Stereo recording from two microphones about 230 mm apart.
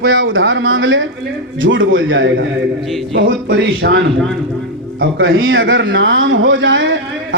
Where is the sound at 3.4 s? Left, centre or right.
Right.